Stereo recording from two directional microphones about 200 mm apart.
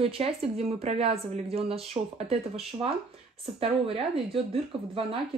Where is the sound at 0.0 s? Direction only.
30° right (ahead or behind).